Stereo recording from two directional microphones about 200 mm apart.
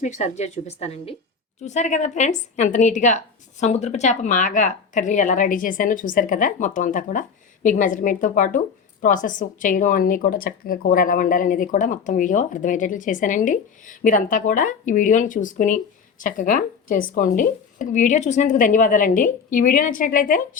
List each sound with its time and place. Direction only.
0.0 s speech: 35° left (ahead or behind)